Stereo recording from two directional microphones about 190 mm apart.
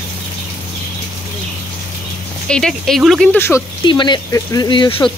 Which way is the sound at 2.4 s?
5° left (ahead or behind).